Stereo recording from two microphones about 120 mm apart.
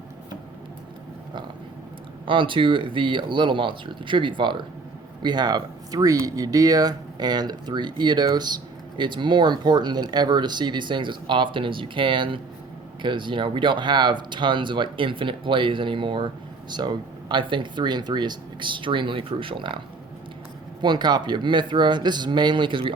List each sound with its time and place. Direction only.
2.2 s speech: 45° right (ahead or behind)
20.8 s speech: 35° right (ahead or behind)